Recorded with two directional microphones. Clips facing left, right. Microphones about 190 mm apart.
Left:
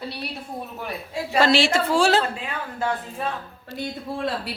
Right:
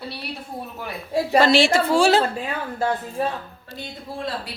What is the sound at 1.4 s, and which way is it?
Speech, 5° left (ahead or behind).